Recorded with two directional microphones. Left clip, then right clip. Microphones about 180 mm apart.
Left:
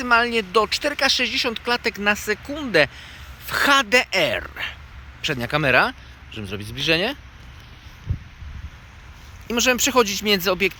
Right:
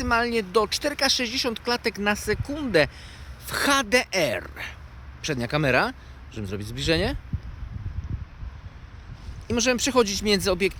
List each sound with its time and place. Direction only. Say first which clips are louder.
0.0 s speech: left 5 dB; centre (ahead or behind)
9.5 s speech: left 4 dB; 5° left (ahead or behind)